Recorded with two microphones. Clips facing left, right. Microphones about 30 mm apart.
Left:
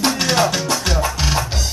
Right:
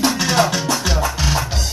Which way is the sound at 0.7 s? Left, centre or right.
Centre.